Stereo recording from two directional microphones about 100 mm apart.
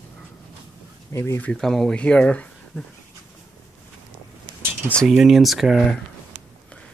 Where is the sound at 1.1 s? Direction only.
30° left (ahead or behind).